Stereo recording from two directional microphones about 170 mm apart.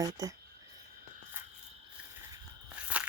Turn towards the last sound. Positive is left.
turn(degrees=-5)  # may be behind; listen again after turning